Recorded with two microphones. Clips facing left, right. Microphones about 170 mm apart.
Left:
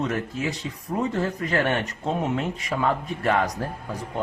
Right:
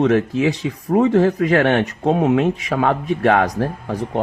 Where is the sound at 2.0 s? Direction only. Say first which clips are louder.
Right 10 dB; 70° right (ahead or behind).